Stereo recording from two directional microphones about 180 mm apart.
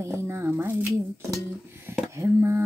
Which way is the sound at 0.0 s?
15° right (ahead or behind).